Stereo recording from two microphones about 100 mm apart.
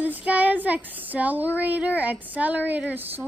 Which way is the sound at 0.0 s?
15° right (ahead or behind).